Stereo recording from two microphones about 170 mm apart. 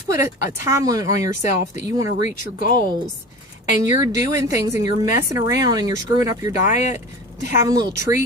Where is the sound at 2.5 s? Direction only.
55° left (ahead or behind).